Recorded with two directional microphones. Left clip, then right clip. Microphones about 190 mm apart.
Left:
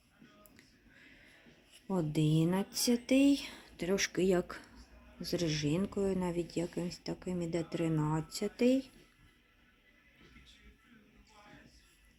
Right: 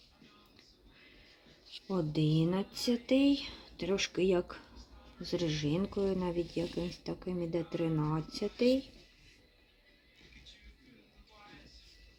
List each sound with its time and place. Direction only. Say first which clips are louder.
1.9 s speech: even; 15° left (ahead or behind)
5.2 s speech: right 1 dB; 35° left (ahead or behind)
5.6 s speech: right 1 dB; 5° left (ahead or behind)